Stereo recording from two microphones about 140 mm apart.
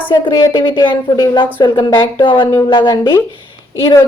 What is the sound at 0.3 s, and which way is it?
A woman's voice, 30° left (ahead or behind).